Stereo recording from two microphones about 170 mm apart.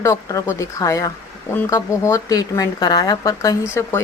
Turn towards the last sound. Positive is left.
turn(degrees=15)  # may be behind; listen again after turning